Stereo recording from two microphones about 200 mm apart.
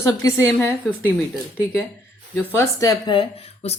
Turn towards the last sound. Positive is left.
turn(degrees=30)  # may be behind; listen again after turning